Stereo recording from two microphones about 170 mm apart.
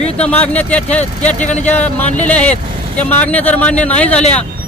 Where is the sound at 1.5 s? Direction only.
45° left (ahead or behind).